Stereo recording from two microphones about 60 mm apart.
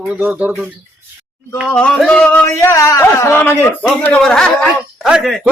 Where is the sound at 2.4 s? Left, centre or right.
Left.